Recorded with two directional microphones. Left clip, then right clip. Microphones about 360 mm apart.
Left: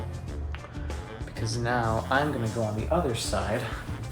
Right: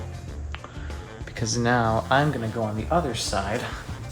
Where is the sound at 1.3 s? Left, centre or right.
Centre.